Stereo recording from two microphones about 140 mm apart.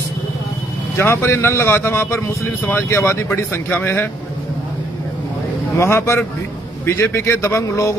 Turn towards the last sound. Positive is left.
turn(degrees=20)  # may be behind; listen again after turning